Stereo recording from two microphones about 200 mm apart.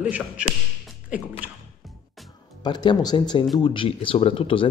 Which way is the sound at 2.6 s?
20° left (ahead or behind).